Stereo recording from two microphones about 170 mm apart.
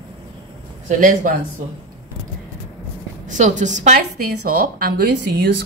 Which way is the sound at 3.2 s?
45° right (ahead or behind).